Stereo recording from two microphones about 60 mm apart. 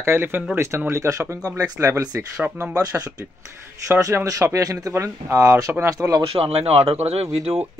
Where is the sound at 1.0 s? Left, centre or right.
Right.